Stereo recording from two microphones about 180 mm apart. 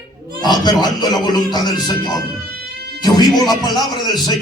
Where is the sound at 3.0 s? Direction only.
25° left (ahead or behind).